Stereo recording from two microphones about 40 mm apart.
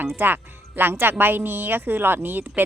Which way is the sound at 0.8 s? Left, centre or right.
Right.